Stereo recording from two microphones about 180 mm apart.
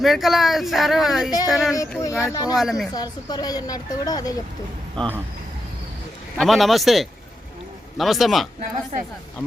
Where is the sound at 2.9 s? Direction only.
20° left (ahead or behind).